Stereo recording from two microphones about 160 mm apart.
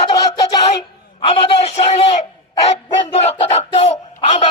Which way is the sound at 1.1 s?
40° left (ahead or behind).